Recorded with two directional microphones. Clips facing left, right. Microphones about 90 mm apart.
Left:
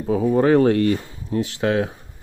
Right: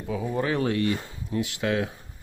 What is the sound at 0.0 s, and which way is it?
Speech, 45° left (ahead or behind).